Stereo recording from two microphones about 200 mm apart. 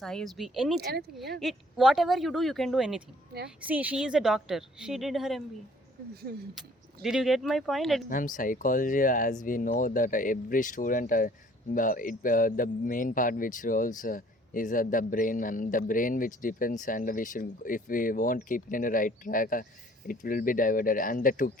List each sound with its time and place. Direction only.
0.0 s speech: 5° left (ahead or behind)
0.8 s speech: 55° right (ahead or behind)
1.4 s speech: centre (ahead or behind)
6.3 s speech: 50° right (ahead or behind)
6.6 s speech: centre (ahead or behind)
8.1 s a man's voice: 40° left (ahead or behind)